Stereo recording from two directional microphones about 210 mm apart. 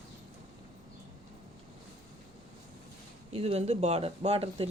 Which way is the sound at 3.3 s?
30° right (ahead or behind).